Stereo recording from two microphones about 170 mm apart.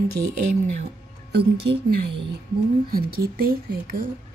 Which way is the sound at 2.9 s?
60° right (ahead or behind).